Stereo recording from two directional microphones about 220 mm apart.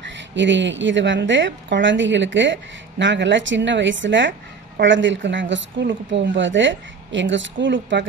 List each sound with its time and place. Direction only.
0.0 s a woman's voice: 55° right (ahead or behind)